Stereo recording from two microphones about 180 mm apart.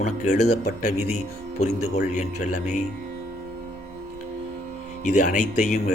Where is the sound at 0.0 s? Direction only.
40° left (ahead or behind).